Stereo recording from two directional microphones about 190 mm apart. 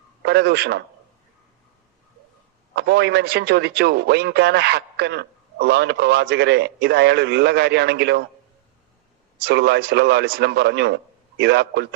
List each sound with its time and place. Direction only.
0.2 s a man's voice: 60° right (ahead or behind)
2.7 s a man's voice: 60° right (ahead or behind)
9.5 s a man's voice: 60° right (ahead or behind)